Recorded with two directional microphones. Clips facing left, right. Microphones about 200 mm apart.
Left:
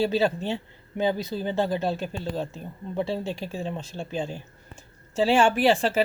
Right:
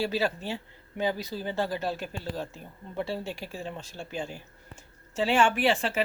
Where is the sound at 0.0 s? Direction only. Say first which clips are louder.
Left 5 dB; 25° left (ahead or behind).